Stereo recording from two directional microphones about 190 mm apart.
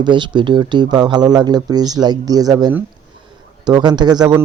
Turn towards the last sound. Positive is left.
turn(degrees=-20)  # may be behind; listen again after turning